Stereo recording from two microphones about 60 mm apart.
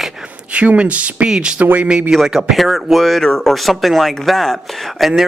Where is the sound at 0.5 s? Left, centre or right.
Centre.